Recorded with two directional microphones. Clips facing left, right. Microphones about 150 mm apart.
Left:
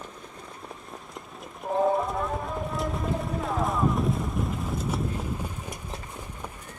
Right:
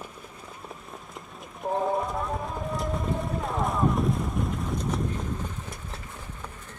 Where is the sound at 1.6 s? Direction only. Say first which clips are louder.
Right 1 dB; centre (ahead or behind).